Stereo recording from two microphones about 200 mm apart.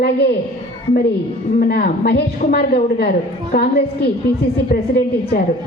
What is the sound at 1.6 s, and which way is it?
A woman's voice, 50° left (ahead or behind).